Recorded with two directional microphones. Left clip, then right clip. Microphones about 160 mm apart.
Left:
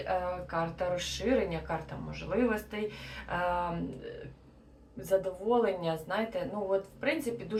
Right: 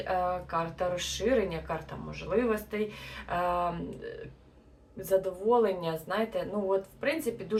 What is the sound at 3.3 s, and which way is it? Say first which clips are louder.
Speech: right 2 dB; 25° right (ahead or behind).